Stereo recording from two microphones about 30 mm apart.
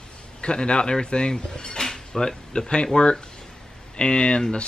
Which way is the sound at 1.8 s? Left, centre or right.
Centre.